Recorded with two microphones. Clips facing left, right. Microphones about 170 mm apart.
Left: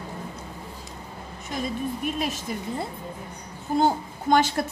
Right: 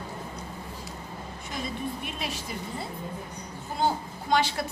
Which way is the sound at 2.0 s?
45° left (ahead or behind).